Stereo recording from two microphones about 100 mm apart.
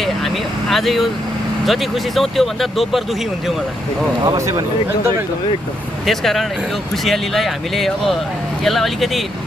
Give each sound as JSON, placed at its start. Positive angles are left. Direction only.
{"t": 0.0, "sound": "vehicle", "side_deg": 0}
{"t": 1.7, "sound": "speech", "side_deg": 0}
{"t": 4.4, "sound": "speech", "side_deg": -30}
{"t": 6.0, "sound": "speech", "side_deg": 0}